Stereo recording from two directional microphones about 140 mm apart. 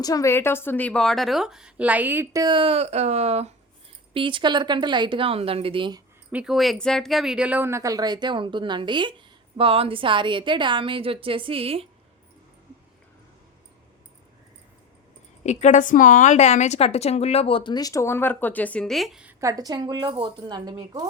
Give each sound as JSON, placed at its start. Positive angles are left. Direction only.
{"t": 0.0, "sound": "a woman's voice", "side_deg": 25}
{"t": 2.4, "sound": "speech", "side_deg": -35}
{"t": 4.1, "sound": "speech", "side_deg": -35}
{"t": 6.3, "sound": "speech", "side_deg": -5}
{"t": 15.4, "sound": "a woman's voice", "side_deg": 60}
{"t": 19.4, "sound": "a woman's voice", "side_deg": -25}